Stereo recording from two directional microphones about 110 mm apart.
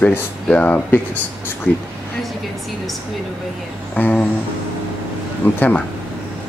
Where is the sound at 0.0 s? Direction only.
15° left (ahead or behind).